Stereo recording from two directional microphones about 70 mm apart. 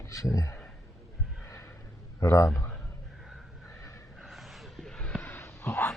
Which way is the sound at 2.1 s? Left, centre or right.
Left.